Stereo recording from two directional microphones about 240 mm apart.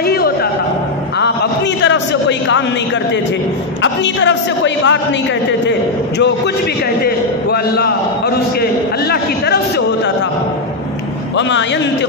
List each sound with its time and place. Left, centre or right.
0.0 s a sound: left
3.8 s a woman's voice: left
7.5 s a woman's voice: left